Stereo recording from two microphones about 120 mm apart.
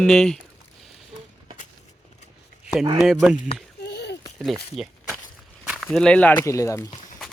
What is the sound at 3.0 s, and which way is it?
Speech, 5° right (ahead or behind).